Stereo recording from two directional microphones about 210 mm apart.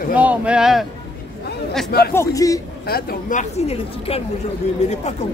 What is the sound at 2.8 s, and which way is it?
A woman's voice, 45° left (ahead or behind).